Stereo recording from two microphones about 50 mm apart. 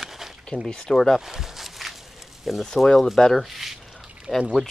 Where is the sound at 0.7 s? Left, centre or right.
Centre.